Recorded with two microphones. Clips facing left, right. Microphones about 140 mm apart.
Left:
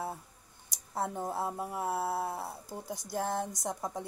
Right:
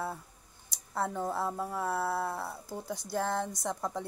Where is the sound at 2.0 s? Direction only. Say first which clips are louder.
Right 1 dB; 65° right (ahead or behind).